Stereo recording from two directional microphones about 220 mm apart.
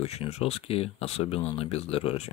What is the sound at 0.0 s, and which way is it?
Speech, 30° left (ahead or behind).